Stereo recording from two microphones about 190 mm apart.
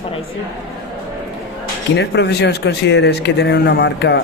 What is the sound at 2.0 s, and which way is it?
Speech, 60° left (ahead or behind).